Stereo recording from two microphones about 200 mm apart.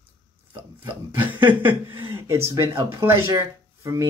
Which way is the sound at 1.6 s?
10° right (ahead or behind).